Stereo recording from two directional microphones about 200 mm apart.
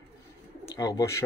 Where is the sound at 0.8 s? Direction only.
15° left (ahead or behind).